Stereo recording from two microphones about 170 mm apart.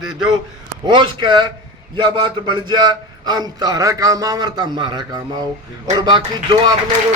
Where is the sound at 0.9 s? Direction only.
25° right (ahead or behind).